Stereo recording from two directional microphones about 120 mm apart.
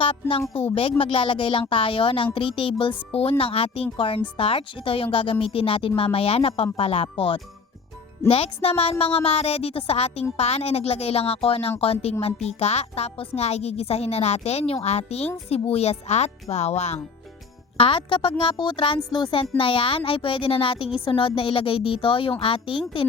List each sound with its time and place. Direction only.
0.0 s a woman's voice: 50° left (ahead or behind); by 17.0 s 65° left (ahead or behind)
17.7 s speech: 45° left (ahead or behind)